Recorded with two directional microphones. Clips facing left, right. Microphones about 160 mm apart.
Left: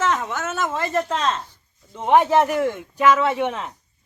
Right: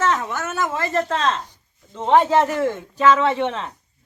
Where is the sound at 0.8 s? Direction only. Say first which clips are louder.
Right 1 dB; 15° left (ahead or behind).